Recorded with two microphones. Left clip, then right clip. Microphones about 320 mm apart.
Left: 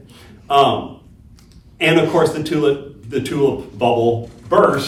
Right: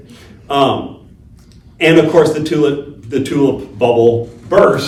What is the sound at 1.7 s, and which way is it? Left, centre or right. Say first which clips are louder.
A man's voice: right 5 dB; centre.